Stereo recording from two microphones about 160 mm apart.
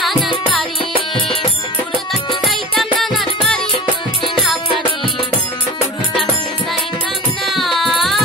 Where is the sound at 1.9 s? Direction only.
Centre (ahead or behind).